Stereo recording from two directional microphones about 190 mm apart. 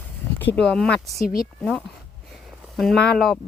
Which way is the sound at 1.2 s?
50° left (ahead or behind).